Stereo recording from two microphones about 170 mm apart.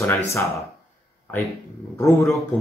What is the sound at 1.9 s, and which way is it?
Speech, 15° left (ahead or behind).